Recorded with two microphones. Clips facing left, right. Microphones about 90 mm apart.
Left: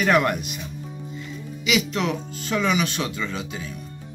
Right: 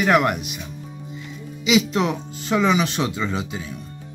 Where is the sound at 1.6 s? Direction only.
25° right (ahead or behind).